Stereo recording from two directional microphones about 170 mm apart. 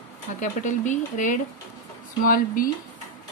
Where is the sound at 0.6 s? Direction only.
45° left (ahead or behind).